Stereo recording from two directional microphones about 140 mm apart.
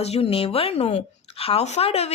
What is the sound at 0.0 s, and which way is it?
Speech, 45° left (ahead or behind).